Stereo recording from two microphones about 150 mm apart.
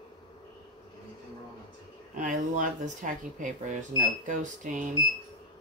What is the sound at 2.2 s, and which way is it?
Speech, 55° right (ahead or behind).